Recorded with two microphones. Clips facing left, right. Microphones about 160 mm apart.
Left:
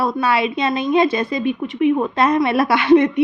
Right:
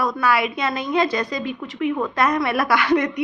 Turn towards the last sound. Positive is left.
turn(degrees=25)  # may be behind; listen again after turning